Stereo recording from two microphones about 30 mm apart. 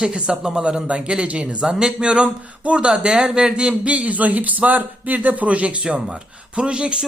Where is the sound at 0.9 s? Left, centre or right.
Right.